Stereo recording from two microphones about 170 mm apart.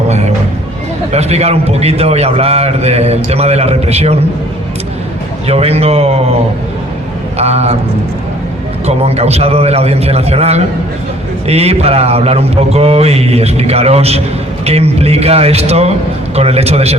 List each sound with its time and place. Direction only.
1.1 s a man's voice: 40° right (ahead or behind)
5.5 s a man's voice: 35° right (ahead or behind)
7.3 s a man's voice: 40° right (ahead or behind)
8.9 s a man's voice: 40° right (ahead or behind)